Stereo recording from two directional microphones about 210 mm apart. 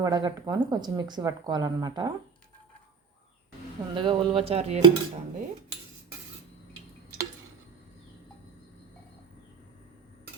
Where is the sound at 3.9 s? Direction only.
25° right (ahead or behind).